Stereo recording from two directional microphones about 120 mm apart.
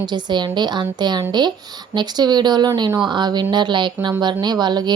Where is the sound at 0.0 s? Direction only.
40° right (ahead or behind).